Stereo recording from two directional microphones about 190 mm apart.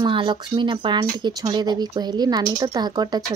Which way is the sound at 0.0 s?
25° right (ahead or behind).